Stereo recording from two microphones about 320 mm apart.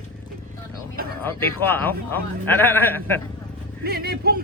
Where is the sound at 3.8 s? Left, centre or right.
Right.